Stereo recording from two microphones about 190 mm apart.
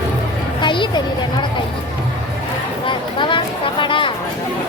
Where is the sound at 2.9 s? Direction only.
25° left (ahead or behind).